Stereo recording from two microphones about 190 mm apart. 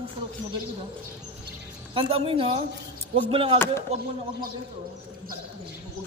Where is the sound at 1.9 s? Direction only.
25° right (ahead or behind).